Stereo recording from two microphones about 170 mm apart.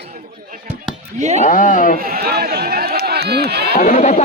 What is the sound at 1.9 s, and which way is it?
Speech, 60° right (ahead or behind).